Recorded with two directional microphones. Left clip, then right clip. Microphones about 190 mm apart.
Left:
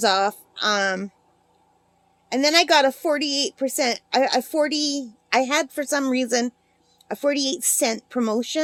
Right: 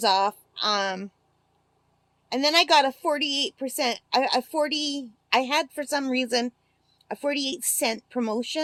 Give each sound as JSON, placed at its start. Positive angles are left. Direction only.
{"t": 0.0, "sound": "a woman's voice", "side_deg": 20}
{"t": 2.3, "sound": "a woman's voice", "side_deg": 20}